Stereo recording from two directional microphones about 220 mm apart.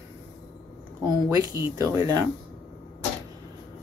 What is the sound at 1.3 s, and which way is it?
Speech, 15° right (ahead or behind).